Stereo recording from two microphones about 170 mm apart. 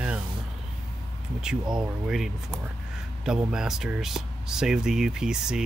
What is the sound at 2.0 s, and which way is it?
Speech, 5° right (ahead or behind).